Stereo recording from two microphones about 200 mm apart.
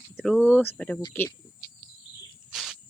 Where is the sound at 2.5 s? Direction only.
Centre (ahead or behind).